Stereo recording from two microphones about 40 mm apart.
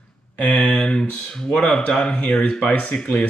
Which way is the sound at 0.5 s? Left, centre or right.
Left.